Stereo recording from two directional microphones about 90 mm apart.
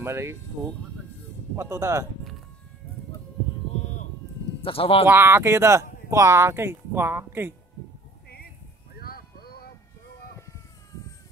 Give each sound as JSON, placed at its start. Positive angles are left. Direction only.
{"t": 0.0, "sound": "speech", "side_deg": -30}
{"t": 1.6, "sound": "speech", "side_deg": -30}
{"t": 4.6, "sound": "speech", "side_deg": 90}
{"t": 5.0, "sound": "speech", "side_deg": -25}